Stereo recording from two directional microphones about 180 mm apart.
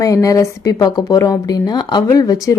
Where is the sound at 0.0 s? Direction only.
15° left (ahead or behind).